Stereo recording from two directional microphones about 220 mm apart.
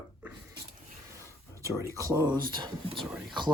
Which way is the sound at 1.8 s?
15° right (ahead or behind).